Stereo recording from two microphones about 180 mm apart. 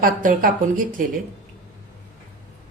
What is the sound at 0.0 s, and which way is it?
A woman's voice, 50° right (ahead or behind).